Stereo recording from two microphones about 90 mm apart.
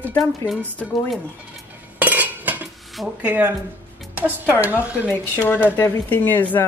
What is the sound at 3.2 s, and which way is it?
A woman's voice, 15° right (ahead or behind).